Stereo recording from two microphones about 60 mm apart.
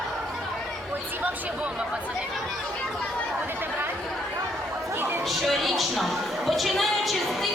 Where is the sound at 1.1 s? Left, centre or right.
Right.